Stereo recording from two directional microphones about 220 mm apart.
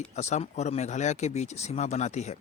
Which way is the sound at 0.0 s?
30° left (ahead or behind).